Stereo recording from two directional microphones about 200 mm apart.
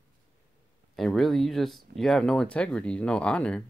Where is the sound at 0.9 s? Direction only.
Centre (ahead or behind).